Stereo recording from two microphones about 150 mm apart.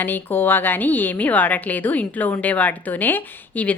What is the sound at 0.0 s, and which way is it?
A woman's voice, 15° left (ahead or behind).